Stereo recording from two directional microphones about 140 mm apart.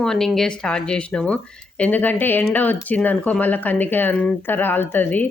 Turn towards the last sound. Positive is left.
turn(degrees=10)  # may be behind; listen again after turning